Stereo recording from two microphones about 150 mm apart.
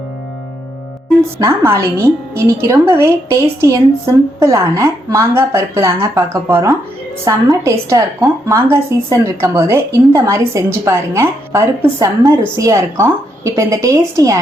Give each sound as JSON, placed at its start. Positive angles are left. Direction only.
{"t": 1.4, "sound": "a woman's voice", "side_deg": -20}